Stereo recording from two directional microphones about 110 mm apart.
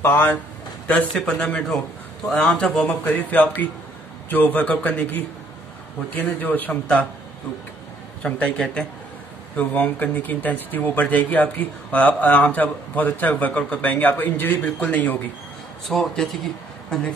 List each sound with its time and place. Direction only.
0.0 s speech: 20° left (ahead or behind)
8.2 s speech: 10° left (ahead or behind)
15.9 s speech: 5° left (ahead or behind)